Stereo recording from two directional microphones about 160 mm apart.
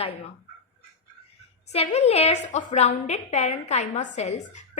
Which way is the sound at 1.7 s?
40° left (ahead or behind).